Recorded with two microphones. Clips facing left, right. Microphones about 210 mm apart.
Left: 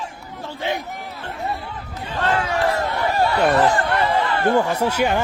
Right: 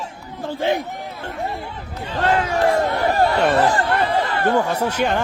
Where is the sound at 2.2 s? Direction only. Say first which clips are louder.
Right 2 dB; 45° right (ahead or behind).